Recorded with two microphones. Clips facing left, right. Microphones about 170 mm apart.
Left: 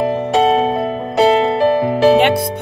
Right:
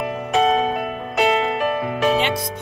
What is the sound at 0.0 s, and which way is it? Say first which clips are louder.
Music: left 5 dB; 30° left (ahead or behind).